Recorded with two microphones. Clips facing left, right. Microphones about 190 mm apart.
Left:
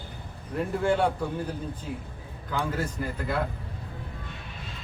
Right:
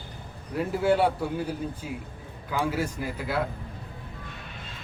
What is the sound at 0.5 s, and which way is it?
Speech, 5° right (ahead or behind).